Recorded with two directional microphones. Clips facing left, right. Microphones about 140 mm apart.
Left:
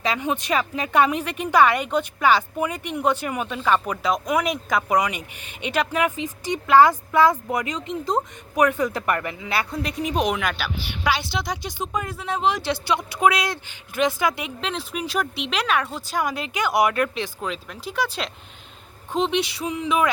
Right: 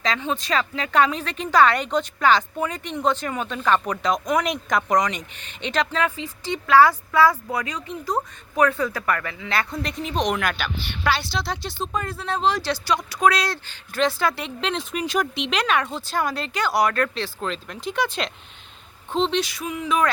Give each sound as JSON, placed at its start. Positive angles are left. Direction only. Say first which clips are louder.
{"t": 0.0, "sound": "speech", "louder": "left 1 dB", "side_deg": 15}
{"t": 9.5, "sound": "speech", "louder": "right 1 dB", "side_deg": 10}
{"t": 19.4, "sound": "a sound", "louder": "left 1 dB", "side_deg": 25}